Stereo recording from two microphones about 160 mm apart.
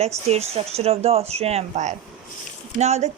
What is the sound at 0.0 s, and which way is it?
Speech, 40° right (ahead or behind).